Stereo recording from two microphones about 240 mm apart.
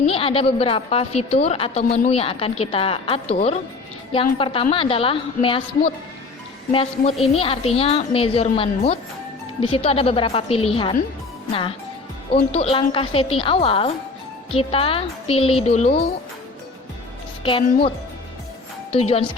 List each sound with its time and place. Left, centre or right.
0.0 s a woman's voice: left
12.3 s a woman's voice: left
17.4 s a woman's voice: left